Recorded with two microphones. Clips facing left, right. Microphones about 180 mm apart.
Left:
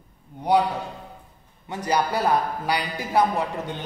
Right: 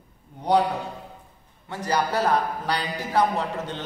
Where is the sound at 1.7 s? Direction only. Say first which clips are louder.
Left 1 dB; 15° left (ahead or behind).